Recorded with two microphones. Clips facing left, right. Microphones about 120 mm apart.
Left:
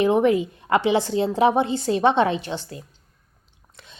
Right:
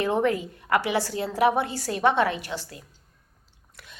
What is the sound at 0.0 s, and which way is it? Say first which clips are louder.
A woman's voice: left 6 dB; 20° left (ahead or behind).